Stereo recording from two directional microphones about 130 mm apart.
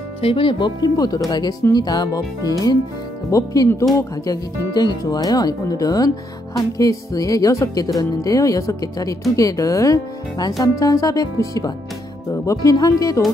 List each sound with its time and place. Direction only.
0.2 s speech: 45° left (ahead or behind); by 13.2 s 25° left (ahead or behind)